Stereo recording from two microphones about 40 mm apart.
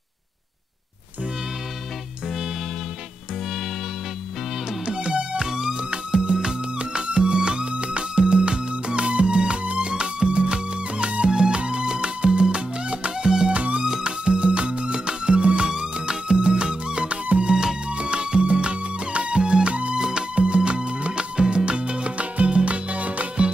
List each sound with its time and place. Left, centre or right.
4.8 s music: right
13.8 s music: centre
14.2 s music: right
20.0 s music: centre
20.3 s music: right